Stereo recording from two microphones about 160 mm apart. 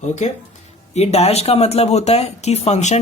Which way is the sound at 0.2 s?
45° left (ahead or behind).